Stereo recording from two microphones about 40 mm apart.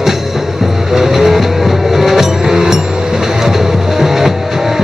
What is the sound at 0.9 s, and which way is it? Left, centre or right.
Music, centre.